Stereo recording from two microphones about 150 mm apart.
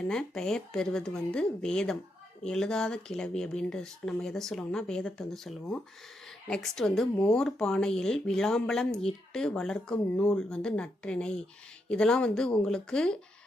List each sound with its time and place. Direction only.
0.1 s speech: 5° left (ahead or behind)